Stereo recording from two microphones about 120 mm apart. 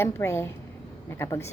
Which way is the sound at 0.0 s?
20° left (ahead or behind).